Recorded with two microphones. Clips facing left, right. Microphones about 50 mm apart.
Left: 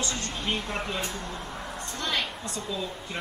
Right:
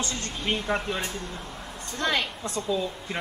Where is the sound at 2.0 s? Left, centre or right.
Centre.